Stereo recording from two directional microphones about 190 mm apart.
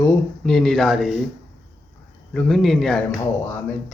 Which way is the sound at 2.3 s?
Centre (ahead or behind).